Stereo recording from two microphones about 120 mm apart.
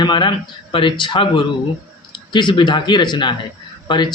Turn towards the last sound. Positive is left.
turn(degrees=40)  # may be behind; listen again after turning